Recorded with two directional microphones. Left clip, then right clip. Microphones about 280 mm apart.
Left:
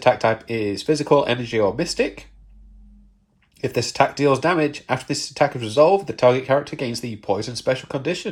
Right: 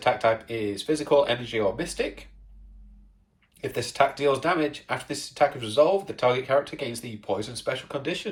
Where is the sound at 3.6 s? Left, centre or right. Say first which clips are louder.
Left 4 dB; centre.